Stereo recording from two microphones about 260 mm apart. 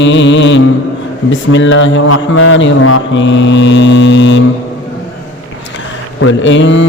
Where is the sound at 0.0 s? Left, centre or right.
Left.